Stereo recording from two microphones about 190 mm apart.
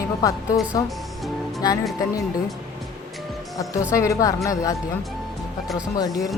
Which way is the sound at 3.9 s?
15° left (ahead or behind).